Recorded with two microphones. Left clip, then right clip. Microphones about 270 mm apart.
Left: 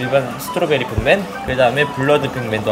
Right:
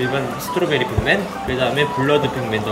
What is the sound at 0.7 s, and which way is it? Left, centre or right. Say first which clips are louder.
Speech: left 4 dB; centre.